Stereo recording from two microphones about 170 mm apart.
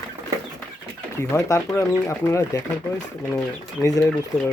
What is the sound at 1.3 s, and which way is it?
Speech, 15° left (ahead or behind).